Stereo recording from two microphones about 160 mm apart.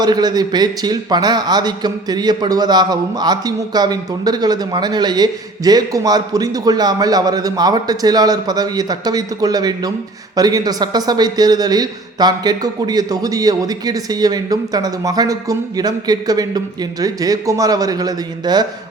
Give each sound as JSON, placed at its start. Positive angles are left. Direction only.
{"t": 0.0, "sound": "a man's voice", "side_deg": -25}